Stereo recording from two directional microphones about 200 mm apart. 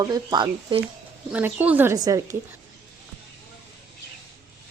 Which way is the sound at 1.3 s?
5° right (ahead or behind).